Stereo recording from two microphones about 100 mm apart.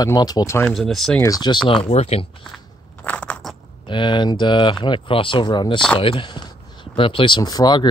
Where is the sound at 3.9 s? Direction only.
55° left (ahead or behind).